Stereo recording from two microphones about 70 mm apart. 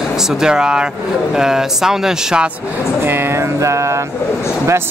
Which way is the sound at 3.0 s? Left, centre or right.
Right.